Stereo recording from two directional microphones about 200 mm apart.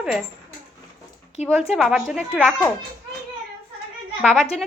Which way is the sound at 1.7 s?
Centre (ahead or behind).